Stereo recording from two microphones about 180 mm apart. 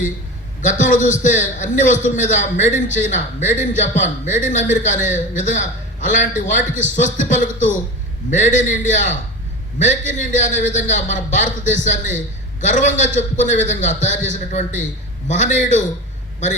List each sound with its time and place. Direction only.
0.6 s a man's voice: 45° left (ahead or behind)